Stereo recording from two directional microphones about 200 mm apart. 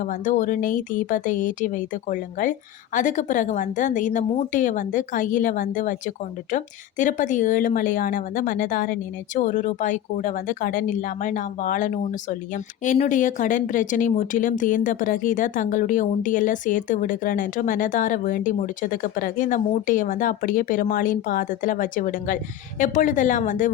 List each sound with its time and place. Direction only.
0.0 s speech: 40° left (ahead or behind)
7.0 s speech: 40° left (ahead or behind)